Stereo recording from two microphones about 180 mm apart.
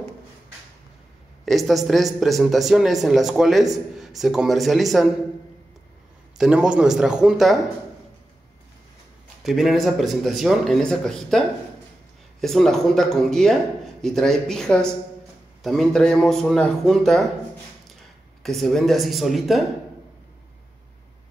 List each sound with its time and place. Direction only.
1.4 s speech: centre (ahead or behind)
6.3 s speech: 5° right (ahead or behind)
9.4 s speech: centre (ahead or behind)
18.4 s speech: centre (ahead or behind)